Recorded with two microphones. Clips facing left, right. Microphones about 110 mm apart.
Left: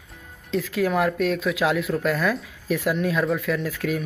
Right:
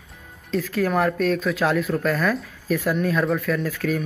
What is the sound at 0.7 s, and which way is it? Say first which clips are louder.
Speech: even; 45° right (ahead or behind).